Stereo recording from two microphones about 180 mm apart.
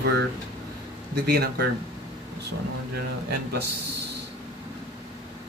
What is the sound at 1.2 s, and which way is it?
Speech, 60° right (ahead or behind).